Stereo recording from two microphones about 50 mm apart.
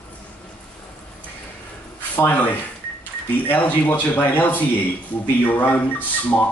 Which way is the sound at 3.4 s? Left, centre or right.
Left.